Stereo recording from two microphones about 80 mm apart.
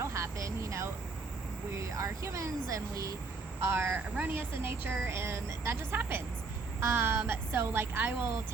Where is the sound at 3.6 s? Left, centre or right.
Right.